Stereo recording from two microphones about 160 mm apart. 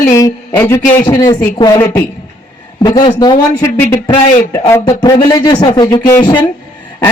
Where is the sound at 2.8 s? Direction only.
25° left (ahead or behind).